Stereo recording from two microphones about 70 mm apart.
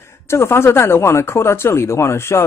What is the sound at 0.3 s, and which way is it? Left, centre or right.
Speech, left.